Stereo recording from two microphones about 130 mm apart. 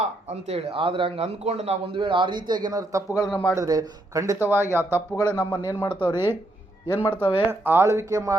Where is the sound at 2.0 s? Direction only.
40° right (ahead or behind); by 5.0 s 15° right (ahead or behind).